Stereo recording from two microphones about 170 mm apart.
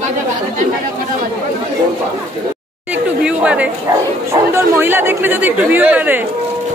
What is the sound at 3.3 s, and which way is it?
Chatter, 5° right (ahead or behind).